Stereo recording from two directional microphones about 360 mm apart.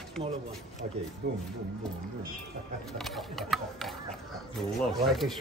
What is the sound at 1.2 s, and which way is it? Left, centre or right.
Speech, right.